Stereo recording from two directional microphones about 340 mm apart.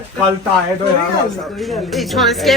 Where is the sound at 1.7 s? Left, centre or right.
Centre.